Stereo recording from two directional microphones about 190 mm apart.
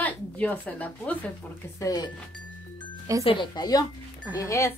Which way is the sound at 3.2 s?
25° left (ahead or behind).